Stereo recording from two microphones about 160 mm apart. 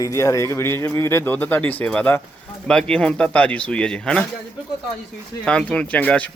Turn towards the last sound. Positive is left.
turn(degrees=10)  # may be behind; listen again after turning